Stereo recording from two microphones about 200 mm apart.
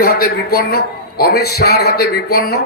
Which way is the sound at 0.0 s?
50° left (ahead or behind).